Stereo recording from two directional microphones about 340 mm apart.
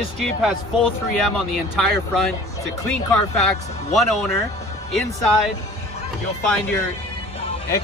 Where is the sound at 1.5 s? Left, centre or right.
Centre.